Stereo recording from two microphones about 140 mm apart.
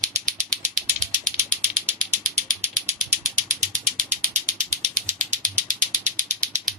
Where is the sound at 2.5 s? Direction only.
70° right (ahead or behind).